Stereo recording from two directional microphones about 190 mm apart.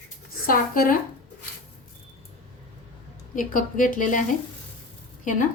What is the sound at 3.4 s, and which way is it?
Speech, 45° left (ahead or behind).